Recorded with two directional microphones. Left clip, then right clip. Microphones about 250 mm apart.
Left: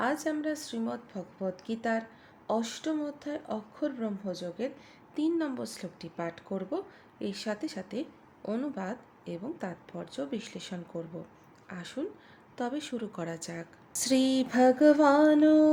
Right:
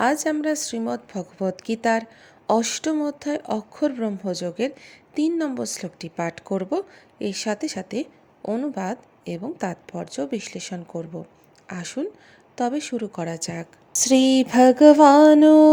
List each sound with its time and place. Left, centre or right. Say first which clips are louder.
0.0 s speech: right 9 dB; right